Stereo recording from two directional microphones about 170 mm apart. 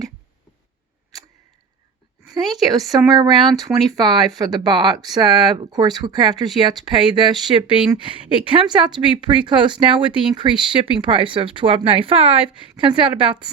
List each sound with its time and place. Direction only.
2.6 s speech: 20° right (ahead or behind)